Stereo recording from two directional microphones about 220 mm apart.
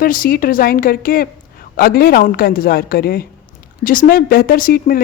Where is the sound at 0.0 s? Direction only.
40° left (ahead or behind).